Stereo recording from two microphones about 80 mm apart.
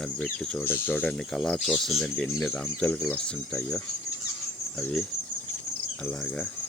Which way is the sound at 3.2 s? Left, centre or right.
Centre.